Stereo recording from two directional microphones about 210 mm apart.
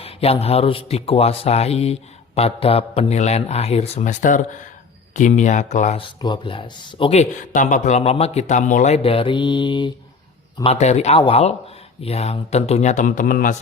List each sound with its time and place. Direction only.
0.0 s a man's voice: 30° left (ahead or behind)